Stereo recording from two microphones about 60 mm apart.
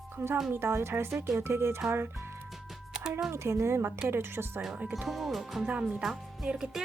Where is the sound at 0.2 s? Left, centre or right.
Right.